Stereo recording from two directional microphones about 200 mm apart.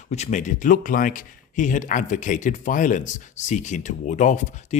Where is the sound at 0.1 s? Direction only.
35° left (ahead or behind).